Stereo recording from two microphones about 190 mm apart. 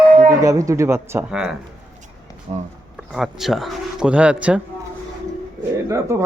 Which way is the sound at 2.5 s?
35° right (ahead or behind).